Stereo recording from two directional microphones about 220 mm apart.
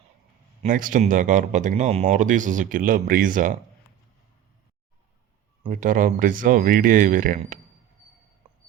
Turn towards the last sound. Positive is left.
turn(degrees=-40)  # may be behind; listen again after turning